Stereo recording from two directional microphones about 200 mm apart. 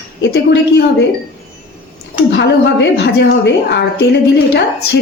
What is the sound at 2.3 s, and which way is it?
A woman's voice, 60° left (ahead or behind).